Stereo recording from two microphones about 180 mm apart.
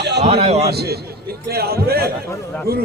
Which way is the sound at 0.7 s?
65° right (ahead or behind).